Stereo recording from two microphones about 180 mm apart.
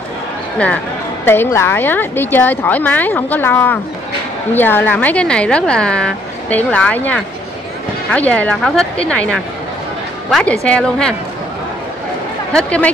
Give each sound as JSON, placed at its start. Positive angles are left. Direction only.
{"t": 1.2, "sound": "a woman's voice", "side_deg": 10}
{"t": 12.5, "sound": "a woman's voice", "side_deg": 5}